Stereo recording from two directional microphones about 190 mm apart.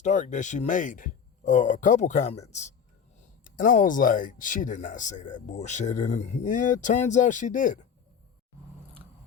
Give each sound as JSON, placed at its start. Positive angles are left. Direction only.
{"t": 0.0, "sound": "speech", "side_deg": 40}